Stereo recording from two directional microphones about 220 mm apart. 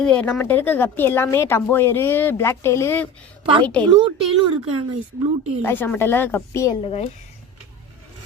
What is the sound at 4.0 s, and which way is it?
Speech, 20° right (ahead or behind).